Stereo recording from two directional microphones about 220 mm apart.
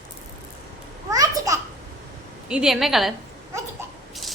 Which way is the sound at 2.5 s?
Centre (ahead or behind).